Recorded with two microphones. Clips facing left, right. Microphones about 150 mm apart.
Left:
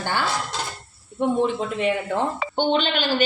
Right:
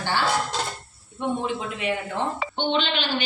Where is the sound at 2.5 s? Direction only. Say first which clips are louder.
Left 4 dB; 45° left (ahead or behind).